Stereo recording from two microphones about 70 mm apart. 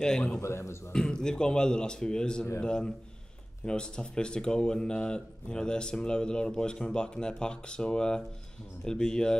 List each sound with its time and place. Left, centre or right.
0.0 s speech: centre
0.4 s a man's voice: left
0.9 s speech: centre